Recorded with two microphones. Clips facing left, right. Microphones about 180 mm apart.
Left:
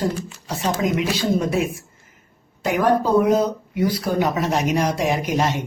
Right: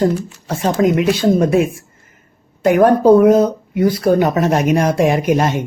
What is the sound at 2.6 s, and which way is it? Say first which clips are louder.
Speech: right 8 dB; 50° right (ahead or behind).